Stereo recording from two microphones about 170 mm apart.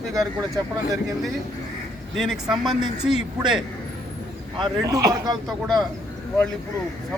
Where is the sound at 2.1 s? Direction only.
Centre (ahead or behind).